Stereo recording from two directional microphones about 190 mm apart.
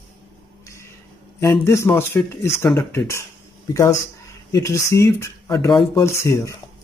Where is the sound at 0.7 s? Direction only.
15° left (ahead or behind).